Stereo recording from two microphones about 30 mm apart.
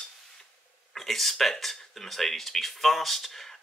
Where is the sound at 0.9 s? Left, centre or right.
Centre.